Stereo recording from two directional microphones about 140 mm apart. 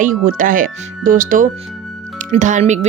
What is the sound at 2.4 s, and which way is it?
Speech, 60° right (ahead or behind).